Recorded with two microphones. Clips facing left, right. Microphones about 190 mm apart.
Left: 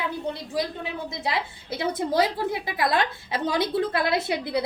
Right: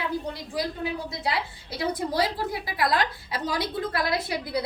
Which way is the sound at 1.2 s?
25° left (ahead or behind).